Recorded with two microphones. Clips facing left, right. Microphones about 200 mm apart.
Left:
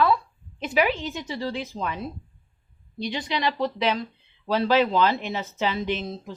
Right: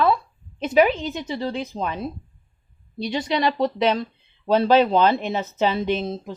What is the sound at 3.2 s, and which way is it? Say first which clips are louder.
Speech: right 5 dB; 45° right (ahead or behind).